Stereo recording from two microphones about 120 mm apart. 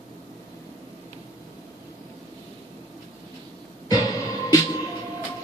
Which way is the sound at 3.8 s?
30° left (ahead or behind).